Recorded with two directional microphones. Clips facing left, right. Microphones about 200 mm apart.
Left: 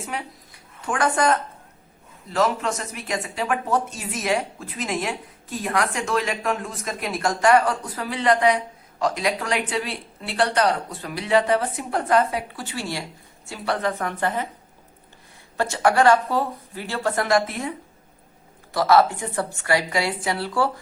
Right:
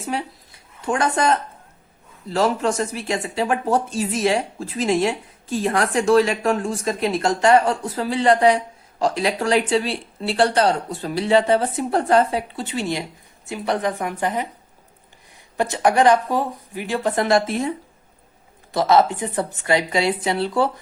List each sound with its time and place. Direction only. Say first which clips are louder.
0.9 s speech: right 1 dB; 25° right (ahead or behind)
15.5 s speech: right 2 dB; 15° right (ahead or behind)